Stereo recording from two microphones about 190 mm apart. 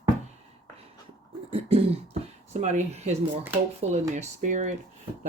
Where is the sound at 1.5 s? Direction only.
30° right (ahead or behind).